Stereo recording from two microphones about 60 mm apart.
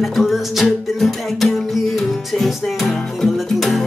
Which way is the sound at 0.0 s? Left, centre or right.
Centre.